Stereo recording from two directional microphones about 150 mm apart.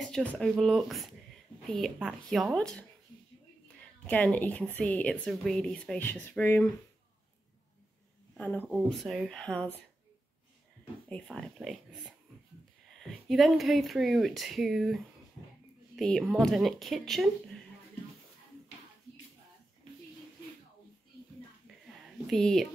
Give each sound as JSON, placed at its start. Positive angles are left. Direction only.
{"t": 0.0, "sound": "speech", "side_deg": 5}
{"t": 3.6, "sound": "a sound", "side_deg": 10}
{"t": 4.7, "sound": "speech", "side_deg": 10}
{"t": 8.4, "sound": "speech", "side_deg": 10}
{"t": 8.8, "sound": "speech", "side_deg": 0}
{"t": 11.1, "sound": "speech", "side_deg": 5}
{"t": 13.3, "sound": "speech", "side_deg": 0}
{"t": 22.3, "sound": "speech", "side_deg": 0}